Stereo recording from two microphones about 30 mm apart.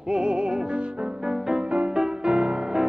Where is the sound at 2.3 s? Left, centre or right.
Right.